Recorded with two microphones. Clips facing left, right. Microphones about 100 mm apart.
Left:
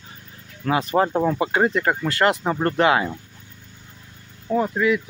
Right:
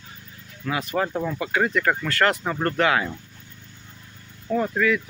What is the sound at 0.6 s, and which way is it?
Speech, 30° left (ahead or behind).